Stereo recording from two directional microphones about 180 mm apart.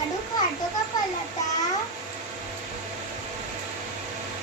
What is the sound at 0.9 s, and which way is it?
Child singing, 20° left (ahead or behind).